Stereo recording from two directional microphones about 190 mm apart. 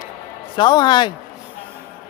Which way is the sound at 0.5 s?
25° left (ahead or behind).